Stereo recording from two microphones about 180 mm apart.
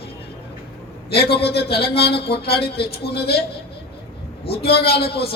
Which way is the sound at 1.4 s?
60° left (ahead or behind).